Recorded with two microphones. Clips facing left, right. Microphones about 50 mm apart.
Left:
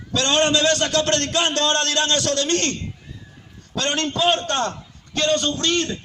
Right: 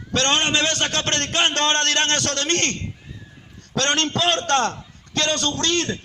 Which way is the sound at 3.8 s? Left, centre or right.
Right.